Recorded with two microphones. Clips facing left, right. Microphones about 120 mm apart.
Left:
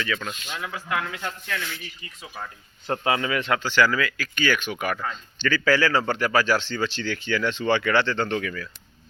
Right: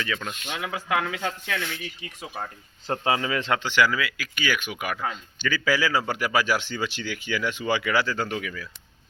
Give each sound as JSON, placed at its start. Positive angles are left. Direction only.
{"t": 0.3, "sound": "speech", "side_deg": -65}
{"t": 2.3, "sound": "speech", "side_deg": -30}